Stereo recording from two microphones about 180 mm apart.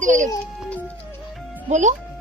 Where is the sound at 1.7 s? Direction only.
40° right (ahead or behind).